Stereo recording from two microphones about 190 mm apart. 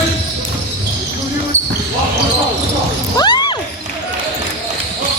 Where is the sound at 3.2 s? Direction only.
20° left (ahead or behind).